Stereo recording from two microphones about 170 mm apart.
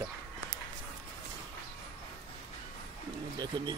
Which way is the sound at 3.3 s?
25° right (ahead or behind).